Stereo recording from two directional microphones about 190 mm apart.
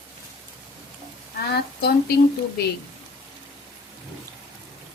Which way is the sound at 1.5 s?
55° left (ahead or behind).